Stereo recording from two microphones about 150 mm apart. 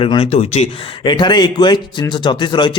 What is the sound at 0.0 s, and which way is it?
Speech, 40° left (ahead or behind).